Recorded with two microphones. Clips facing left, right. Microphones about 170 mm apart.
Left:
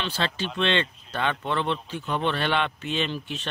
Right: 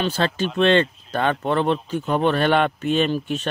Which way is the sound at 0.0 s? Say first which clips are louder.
Right 7 dB; 45° right (ahead or behind).